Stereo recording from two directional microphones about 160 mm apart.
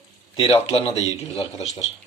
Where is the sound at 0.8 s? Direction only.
35° left (ahead or behind).